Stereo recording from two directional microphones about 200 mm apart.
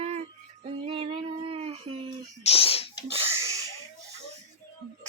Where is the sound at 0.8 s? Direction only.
25° right (ahead or behind).